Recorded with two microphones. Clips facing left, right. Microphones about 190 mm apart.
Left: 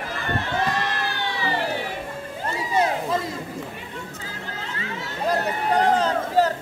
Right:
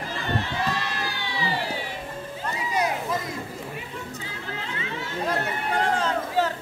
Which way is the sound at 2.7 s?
30° left (ahead or behind).